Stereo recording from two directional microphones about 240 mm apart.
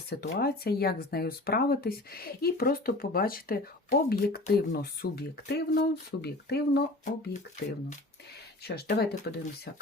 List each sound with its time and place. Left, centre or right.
0.1 s speech: left
8.6 s speech: left